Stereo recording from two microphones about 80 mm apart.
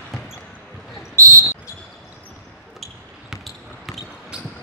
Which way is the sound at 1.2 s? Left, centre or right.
Right.